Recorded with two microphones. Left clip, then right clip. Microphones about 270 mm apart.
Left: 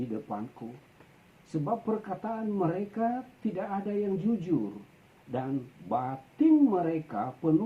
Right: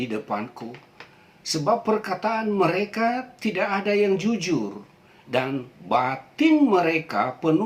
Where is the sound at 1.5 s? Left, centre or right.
Centre.